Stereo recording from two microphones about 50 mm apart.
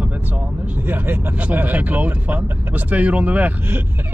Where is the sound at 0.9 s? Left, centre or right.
Right.